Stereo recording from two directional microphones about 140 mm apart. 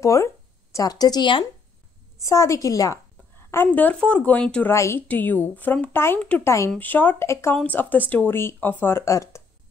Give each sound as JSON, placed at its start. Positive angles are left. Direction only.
{"t": 0.0, "sound": "speech", "side_deg": 20}
{"t": 2.2, "sound": "a woman's voice", "side_deg": 20}
{"t": 3.6, "sound": "speech", "side_deg": 10}
{"t": 4.7, "sound": "speech", "side_deg": 20}